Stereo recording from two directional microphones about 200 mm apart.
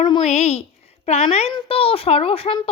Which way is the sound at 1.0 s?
30° left (ahead or behind).